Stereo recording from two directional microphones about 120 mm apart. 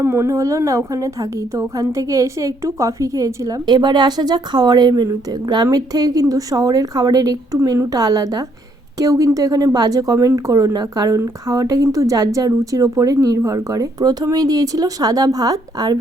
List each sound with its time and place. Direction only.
0.0 s a woman's voice: 20° right (ahead or behind)